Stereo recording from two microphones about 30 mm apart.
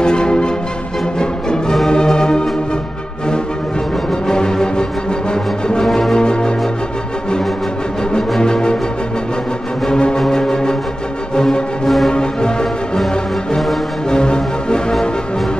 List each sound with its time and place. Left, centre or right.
0.0 s music: left
4.1 s music: left
8.4 s music: left
9.8 s music: left
11.8 s music: centre
12.1 s music: left
14.0 s music: left